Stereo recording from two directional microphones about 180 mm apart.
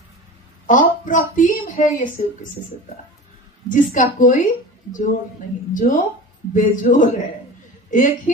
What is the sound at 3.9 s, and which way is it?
Speech, 50° left (ahead or behind).